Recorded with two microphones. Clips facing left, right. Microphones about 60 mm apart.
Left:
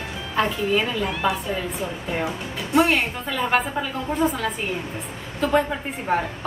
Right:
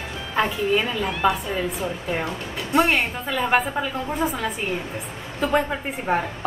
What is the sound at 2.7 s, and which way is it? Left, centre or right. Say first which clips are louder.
Speech: left 1 dB; centre.